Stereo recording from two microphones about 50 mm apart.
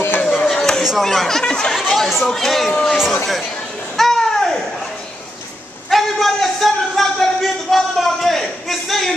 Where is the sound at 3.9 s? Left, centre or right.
Centre.